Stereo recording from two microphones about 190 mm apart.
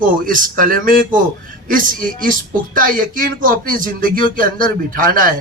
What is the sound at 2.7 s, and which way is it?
A man's voice, 45° right (ahead or behind).